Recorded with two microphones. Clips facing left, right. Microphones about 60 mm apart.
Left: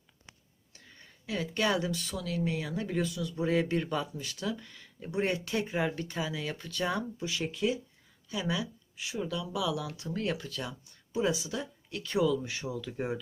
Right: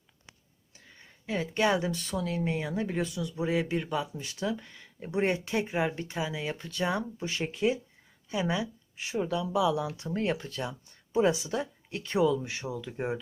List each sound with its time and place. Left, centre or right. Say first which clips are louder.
0.9 s speech: right 3 dB; centre
4.1 s speech: right 3 dB; right
7.3 s speech: right 3 dB; right
11.1 s speech: right 5 dB; right; by 13.1 s centre